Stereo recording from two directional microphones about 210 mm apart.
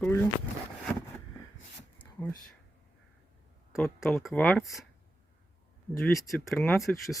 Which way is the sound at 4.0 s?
Centre (ahead or behind).